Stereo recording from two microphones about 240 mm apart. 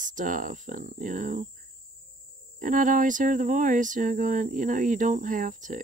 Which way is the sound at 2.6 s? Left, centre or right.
Right.